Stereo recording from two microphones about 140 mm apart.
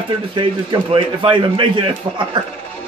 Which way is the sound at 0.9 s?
35° right (ahead or behind).